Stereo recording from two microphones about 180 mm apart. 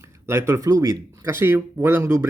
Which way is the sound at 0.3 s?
15° right (ahead or behind).